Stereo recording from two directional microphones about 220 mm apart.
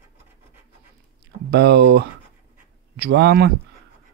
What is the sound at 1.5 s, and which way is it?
Speech, 50° right (ahead or behind).